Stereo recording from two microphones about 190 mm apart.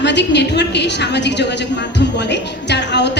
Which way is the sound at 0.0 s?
65° left (ahead or behind).